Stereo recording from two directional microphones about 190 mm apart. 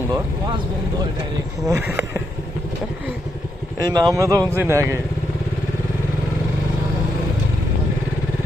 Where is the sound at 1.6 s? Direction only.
15° right (ahead or behind).